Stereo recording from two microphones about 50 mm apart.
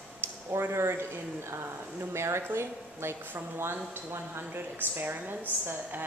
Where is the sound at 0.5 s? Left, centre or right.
Right.